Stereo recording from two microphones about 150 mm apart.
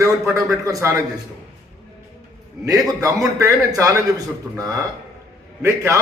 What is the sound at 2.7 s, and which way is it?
A man's voice, 20° right (ahead or behind).